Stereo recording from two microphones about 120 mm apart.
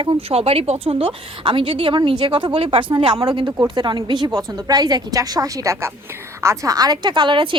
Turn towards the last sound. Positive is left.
turn(degrees=-45)  # may be behind; listen again after turning